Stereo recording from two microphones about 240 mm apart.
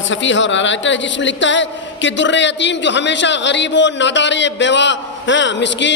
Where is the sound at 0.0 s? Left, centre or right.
Left.